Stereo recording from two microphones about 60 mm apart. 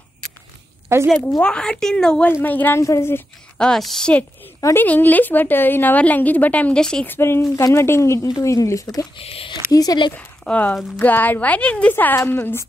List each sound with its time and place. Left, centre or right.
0.9 s a woman's voice: right
1.4 s a woman's voice: centre
2.4 s a woman's voice: left
2.8 s speech: left
3.5 s a woman's voice: centre
4.7 s a woman's voice: left
6.8 s a woman's voice: centre
7.1 s speech: left
9.7 s speech: left
10.5 s a woman's voice: centre
11.0 s a woman's voice: left
11.9 s a woman's voice: left